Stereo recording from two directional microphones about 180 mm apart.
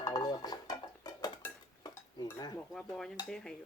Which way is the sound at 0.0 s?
20° left (ahead or behind).